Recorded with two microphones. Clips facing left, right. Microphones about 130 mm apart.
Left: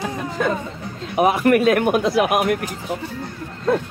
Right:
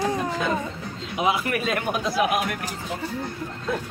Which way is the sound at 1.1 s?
55° left (ahead or behind).